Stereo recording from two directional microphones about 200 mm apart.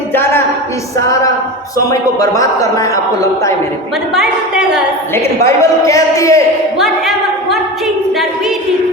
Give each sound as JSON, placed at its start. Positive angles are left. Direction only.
{"t": 0.1, "sound": "a sound", "side_deg": 10}
{"t": 1.9, "sound": "a man's voice", "side_deg": 15}
{"t": 4.1, "sound": "a woman's voice", "side_deg": -5}
{"t": 5.1, "sound": "a man's voice", "side_deg": 15}